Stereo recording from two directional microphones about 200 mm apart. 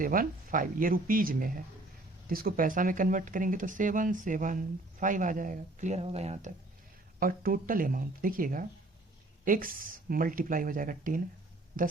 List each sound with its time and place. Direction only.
0.0 s speech: 45° right (ahead or behind)
7.2 s speech: 45° right (ahead or behind)